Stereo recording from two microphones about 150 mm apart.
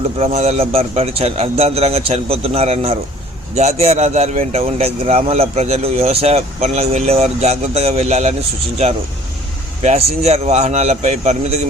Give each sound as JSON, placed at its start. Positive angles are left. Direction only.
{"t": 0.2, "sound": "speech", "side_deg": -45}
{"t": 9.8, "sound": "speech", "side_deg": -45}